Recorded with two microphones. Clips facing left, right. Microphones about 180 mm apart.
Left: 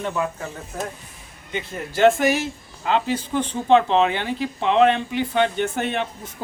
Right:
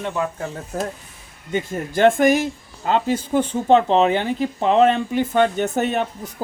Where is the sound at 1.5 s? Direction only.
50° right (ahead or behind).